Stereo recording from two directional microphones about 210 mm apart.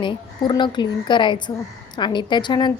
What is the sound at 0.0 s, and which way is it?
A woman's voice, 20° left (ahead or behind).